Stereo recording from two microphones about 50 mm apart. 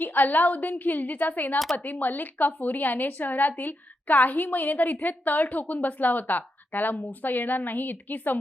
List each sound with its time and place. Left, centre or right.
0.0 s a woman's voice: left